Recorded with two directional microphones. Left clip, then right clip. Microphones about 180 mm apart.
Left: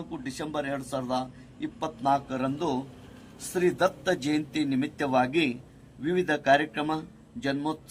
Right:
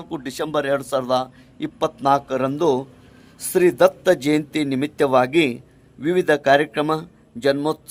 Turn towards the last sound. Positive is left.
turn(degrees=-45)  # may be behind; listen again after turning